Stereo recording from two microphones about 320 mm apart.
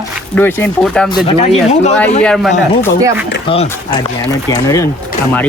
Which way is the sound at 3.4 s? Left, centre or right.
Centre.